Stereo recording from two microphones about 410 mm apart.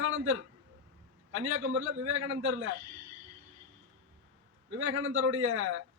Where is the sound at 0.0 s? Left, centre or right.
Right.